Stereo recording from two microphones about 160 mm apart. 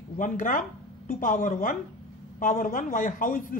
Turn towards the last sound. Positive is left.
turn(degrees=60)  # may be behind; listen again after turning